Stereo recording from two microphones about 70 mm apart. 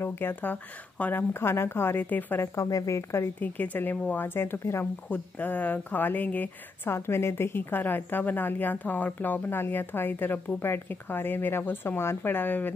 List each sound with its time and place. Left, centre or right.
0.0 s speech: left
1.3 s a woman's voice: left
2.4 s speech: left
3.3 s speech: left
5.1 s speech: left